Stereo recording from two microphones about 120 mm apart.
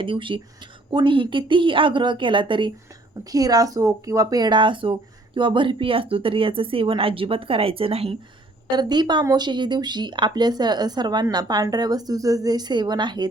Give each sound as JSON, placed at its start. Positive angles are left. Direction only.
{"t": 0.0, "sound": "speech", "side_deg": -45}
{"t": 3.2, "sound": "speech", "side_deg": -30}
{"t": 8.7, "sound": "speech", "side_deg": -35}